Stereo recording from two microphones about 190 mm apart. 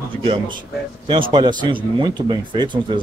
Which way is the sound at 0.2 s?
30° right (ahead or behind).